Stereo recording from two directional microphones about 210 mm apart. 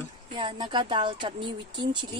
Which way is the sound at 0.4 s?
25° right (ahead or behind).